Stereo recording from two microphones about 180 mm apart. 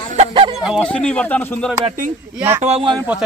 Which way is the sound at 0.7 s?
5° left (ahead or behind).